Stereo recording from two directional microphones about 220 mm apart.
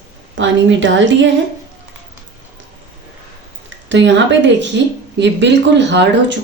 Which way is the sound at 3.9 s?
55° right (ahead or behind).